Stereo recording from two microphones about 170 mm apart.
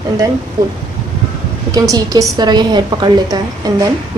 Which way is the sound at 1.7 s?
20° right (ahead or behind).